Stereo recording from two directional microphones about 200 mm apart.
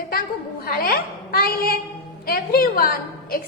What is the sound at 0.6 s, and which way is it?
A woman's voice, 50° left (ahead or behind).